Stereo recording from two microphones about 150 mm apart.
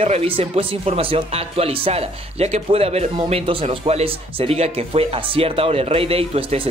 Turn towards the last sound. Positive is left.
turn(degrees=-40)  # may be behind; listen again after turning